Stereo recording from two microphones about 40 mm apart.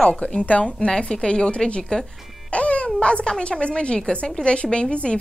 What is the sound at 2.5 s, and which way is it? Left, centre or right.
Speech, left.